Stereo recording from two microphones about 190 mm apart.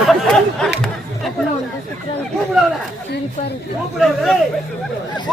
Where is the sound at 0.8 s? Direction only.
Centre (ahead or behind).